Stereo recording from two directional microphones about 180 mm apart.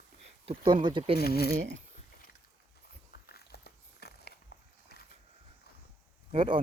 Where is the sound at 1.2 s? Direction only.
60° left (ahead or behind).